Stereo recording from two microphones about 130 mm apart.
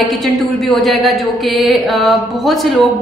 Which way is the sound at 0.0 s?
Centre (ahead or behind).